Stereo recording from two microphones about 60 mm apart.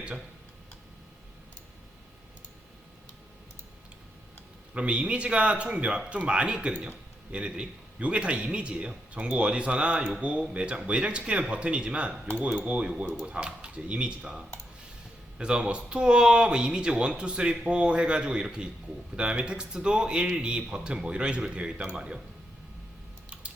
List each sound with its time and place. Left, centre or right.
4.7 s a man's voice: right
23.3 s typing: right